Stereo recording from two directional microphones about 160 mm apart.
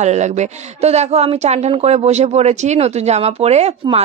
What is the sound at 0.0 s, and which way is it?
A woman's voice, 45° right (ahead or behind).